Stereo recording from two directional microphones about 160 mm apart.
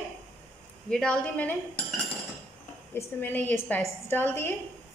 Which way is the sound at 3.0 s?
10° left (ahead or behind).